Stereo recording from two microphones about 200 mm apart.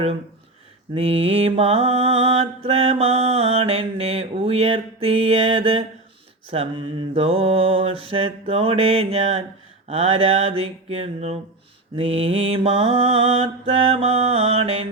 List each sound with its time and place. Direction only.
0.9 s mantra: 30° right (ahead or behind)